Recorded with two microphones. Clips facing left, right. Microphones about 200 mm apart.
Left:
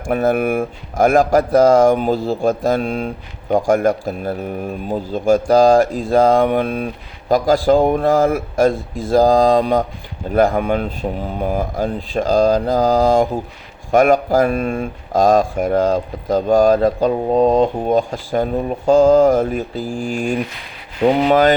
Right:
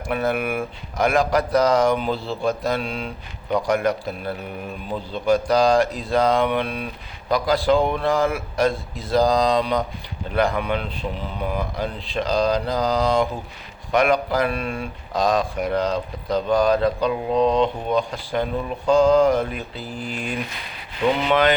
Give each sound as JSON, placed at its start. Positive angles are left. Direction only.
{"t": 0.1, "sound": "speech", "side_deg": 45}
{"t": 8.2, "sound": "speech", "side_deg": 35}